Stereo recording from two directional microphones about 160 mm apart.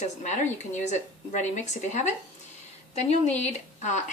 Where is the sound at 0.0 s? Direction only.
50° left (ahead or behind).